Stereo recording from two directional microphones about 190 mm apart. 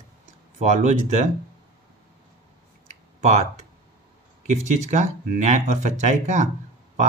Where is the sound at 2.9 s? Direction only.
35° right (ahead or behind).